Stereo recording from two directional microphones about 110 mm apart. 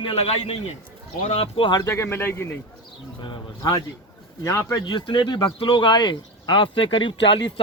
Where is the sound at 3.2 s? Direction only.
45° left (ahead or behind).